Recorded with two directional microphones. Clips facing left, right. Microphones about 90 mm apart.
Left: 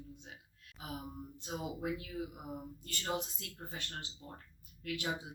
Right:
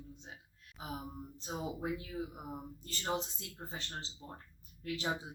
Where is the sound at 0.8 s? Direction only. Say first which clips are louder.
Right 1 dB; 25° right (ahead or behind).